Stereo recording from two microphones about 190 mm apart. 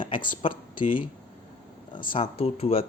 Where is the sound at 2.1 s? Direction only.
30° left (ahead or behind).